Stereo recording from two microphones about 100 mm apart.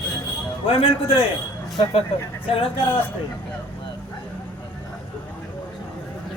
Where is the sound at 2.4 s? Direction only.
65° left (ahead or behind).